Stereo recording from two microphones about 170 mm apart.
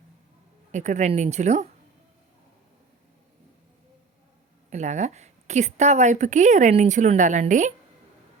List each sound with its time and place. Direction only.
0.7 s a woman's voice: 45° right (ahead or behind)
4.7 s a woman's voice: 45° right (ahead or behind)